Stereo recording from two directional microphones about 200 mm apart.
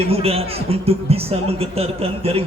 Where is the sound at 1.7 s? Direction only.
30° right (ahead or behind).